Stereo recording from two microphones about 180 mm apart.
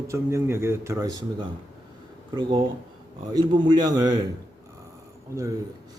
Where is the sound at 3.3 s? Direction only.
25° right (ahead or behind).